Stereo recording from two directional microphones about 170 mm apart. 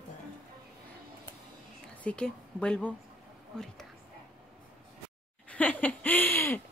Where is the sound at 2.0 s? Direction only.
5° left (ahead or behind).